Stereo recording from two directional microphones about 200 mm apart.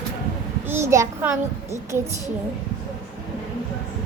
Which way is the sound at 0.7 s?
15° right (ahead or behind).